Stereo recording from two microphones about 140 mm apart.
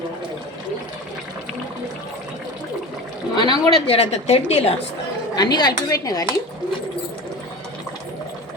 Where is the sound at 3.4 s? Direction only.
40° left (ahead or behind).